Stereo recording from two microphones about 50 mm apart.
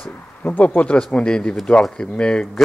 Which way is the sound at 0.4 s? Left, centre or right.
Left.